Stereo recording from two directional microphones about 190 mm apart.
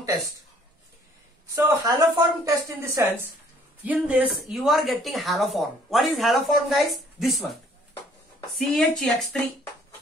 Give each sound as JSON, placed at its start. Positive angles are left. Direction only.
{"t": 1.5, "sound": "speech", "side_deg": -20}
{"t": 8.5, "sound": "speech", "side_deg": 5}